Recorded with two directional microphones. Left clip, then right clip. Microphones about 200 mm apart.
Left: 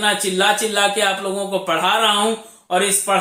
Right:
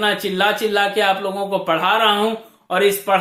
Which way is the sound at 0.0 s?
45° right (ahead or behind).